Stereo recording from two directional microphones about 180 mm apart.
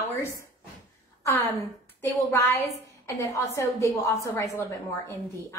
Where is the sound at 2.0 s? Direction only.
15° left (ahead or behind).